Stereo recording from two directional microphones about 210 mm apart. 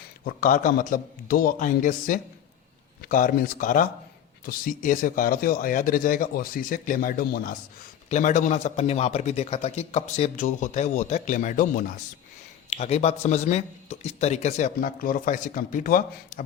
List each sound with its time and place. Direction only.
0.3 s speech: 40° left (ahead or behind)